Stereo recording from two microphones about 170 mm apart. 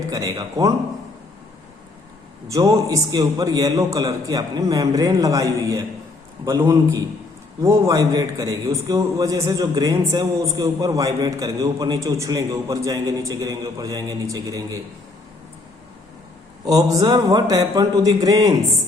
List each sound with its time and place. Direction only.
0.1 s a man's voice: 20° right (ahead or behind)
2.5 s a man's voice: 20° right (ahead or behind)
16.6 s a man's voice: 20° right (ahead or behind)